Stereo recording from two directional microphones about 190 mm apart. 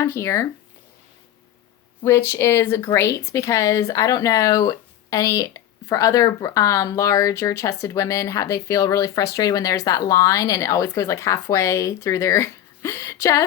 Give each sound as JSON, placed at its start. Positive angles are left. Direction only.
{"t": 0.0, "sound": "speech", "side_deg": 15}
{"t": 2.0, "sound": "speech", "side_deg": 15}